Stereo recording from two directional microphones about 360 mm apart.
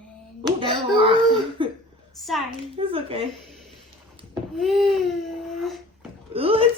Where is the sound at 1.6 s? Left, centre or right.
Centre.